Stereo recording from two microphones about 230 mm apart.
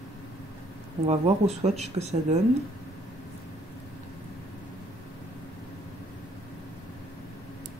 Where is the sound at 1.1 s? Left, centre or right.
Right.